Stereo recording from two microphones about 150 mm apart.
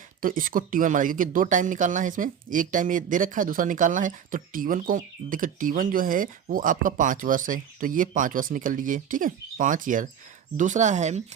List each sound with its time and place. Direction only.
0.2 s speech: 65° right (ahead or behind); by 11.2 s 50° right (ahead or behind)